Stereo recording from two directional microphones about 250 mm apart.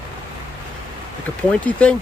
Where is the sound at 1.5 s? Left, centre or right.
Centre.